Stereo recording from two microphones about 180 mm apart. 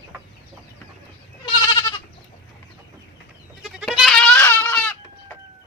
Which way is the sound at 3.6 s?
Centre (ahead or behind).